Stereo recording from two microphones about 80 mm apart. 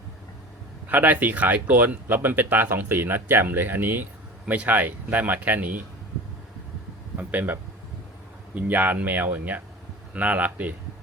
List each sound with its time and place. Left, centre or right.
0.9 s speech: right
7.2 s speech: right